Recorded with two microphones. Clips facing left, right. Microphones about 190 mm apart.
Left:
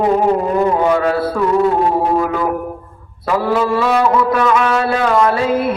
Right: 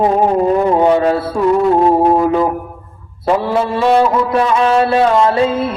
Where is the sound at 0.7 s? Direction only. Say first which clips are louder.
Right 3 dB; 25° right (ahead or behind).